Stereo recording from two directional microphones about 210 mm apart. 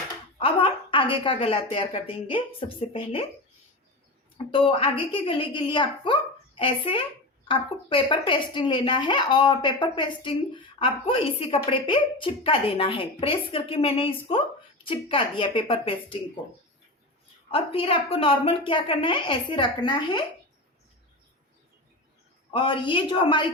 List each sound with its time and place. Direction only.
0.3 s a woman's voice: 25° left (ahead or behind)
4.5 s a woman's voice: 25° left (ahead or behind)
17.5 s a woman's voice: 25° left (ahead or behind)
22.5 s a woman's voice: 25° left (ahead or behind)